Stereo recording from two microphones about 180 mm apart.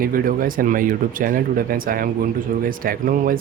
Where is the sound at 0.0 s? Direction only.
50° right (ahead or behind).